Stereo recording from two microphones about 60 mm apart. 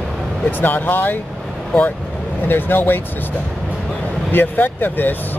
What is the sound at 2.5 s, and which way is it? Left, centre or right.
Speech, left.